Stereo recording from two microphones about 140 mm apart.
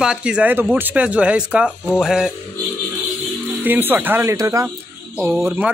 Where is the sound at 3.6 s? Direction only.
15° right (ahead or behind).